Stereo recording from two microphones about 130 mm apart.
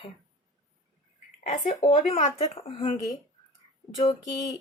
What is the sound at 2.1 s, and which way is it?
Speech, 45° left (ahead or behind).